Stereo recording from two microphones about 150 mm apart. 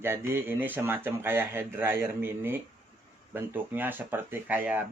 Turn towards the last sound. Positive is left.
turn(degrees=-10)  # may be behind; listen again after turning